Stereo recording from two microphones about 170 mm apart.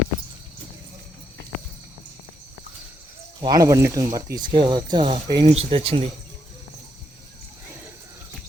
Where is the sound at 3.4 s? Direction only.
20° right (ahead or behind).